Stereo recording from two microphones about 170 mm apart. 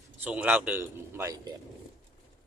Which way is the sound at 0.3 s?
10° right (ahead or behind).